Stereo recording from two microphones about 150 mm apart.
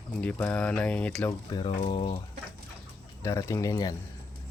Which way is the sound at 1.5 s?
35° left (ahead or behind).